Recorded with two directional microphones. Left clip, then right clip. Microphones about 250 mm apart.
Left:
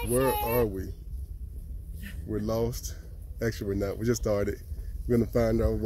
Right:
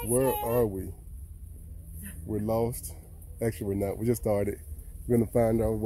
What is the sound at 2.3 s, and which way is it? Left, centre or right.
Speech, centre.